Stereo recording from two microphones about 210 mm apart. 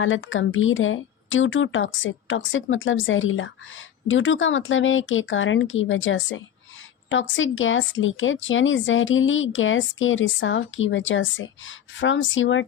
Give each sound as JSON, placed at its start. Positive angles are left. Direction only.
{"t": 0.0, "sound": "speech", "side_deg": 65}